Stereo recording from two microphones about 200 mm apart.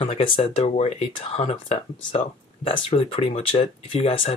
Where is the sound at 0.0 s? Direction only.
25° left (ahead or behind).